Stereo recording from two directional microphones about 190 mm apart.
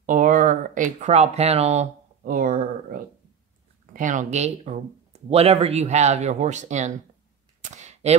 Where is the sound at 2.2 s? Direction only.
45° right (ahead or behind).